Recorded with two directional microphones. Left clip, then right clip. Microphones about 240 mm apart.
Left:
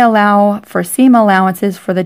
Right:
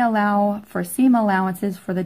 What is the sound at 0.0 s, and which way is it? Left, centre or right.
Speech, left.